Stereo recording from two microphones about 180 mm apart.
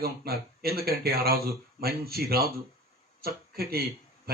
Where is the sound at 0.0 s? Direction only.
60° right (ahead or behind).